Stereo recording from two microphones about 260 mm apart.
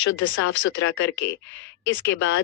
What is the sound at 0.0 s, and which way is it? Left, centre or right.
Speech, left.